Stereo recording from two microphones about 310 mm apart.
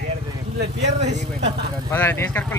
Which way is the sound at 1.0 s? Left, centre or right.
Right.